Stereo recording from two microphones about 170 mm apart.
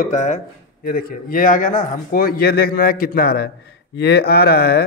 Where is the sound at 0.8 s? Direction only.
60° left (ahead or behind).